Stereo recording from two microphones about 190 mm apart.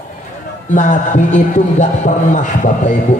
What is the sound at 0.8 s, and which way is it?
A man's voice, 40° left (ahead or behind).